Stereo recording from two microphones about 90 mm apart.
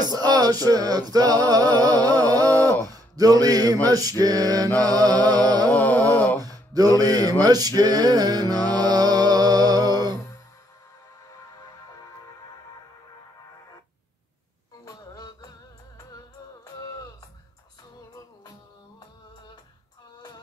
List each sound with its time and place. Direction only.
0.0 s male singing: 50° right (ahead or behind)
2.9 s a sound: 45° right (ahead or behind)
3.8 s music: 45° right (ahead or behind)
5.9 s a sound: 40° right (ahead or behind)
6.4 s mantra: 45° right (ahead or behind)
7.4 s music: 45° right (ahead or behind)
14.9 s music: 45° left (ahead or behind)